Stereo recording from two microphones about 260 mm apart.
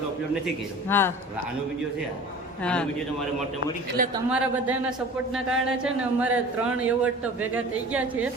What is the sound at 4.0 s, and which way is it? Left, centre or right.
Speech, right.